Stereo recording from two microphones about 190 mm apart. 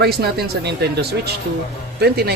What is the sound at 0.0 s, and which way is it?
Speech, 55° right (ahead or behind).